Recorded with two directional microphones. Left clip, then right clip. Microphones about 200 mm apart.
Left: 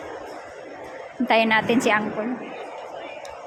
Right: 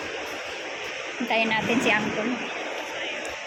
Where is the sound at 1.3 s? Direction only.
30° left (ahead or behind).